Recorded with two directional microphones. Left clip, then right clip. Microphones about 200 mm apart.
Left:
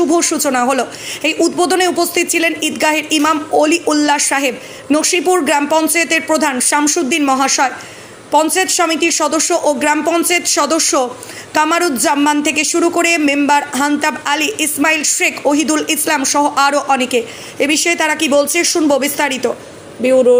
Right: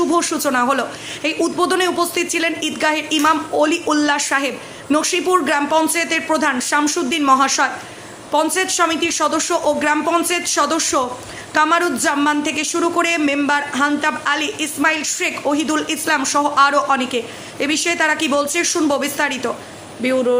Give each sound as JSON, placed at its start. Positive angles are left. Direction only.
{"t": 0.1, "sound": "speech", "side_deg": 15}
{"t": 20.0, "sound": "speech", "side_deg": 5}